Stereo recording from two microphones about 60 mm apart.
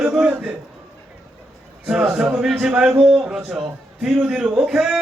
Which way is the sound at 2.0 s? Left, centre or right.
Centre.